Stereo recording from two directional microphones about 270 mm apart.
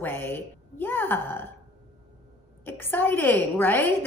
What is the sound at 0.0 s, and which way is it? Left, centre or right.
A woman's voice, centre.